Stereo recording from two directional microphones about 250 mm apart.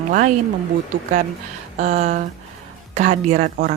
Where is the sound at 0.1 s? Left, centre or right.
Right.